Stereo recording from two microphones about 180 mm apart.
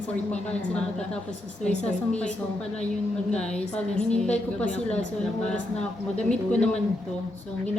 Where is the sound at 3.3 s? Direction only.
5° left (ahead or behind).